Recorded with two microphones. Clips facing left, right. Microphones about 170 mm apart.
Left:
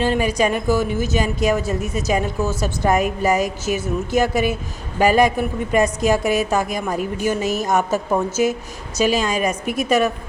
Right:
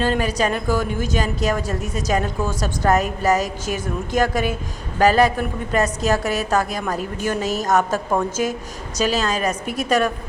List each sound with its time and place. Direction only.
0.0 s a woman's voice: 10° left (ahead or behind)